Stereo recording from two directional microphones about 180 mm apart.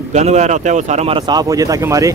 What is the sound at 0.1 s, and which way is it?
Speech, 40° right (ahead or behind).